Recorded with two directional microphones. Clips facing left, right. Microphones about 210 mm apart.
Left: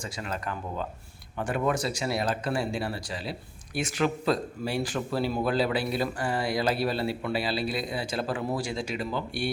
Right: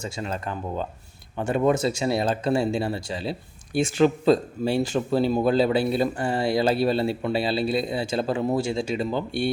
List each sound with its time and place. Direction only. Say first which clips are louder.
0.0 s speech: right 4 dB; 25° right (ahead or behind)